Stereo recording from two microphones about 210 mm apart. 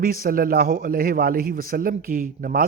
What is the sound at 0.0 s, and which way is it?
A man's voice, 45° right (ahead or behind).